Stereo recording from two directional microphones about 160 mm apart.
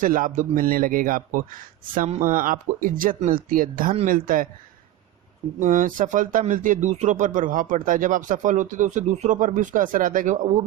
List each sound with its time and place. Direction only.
0.0 s a man's voice: 55° right (ahead or behind)
2.0 s a man's voice: 50° right (ahead or behind)
5.5 s speech: 55° right (ahead or behind)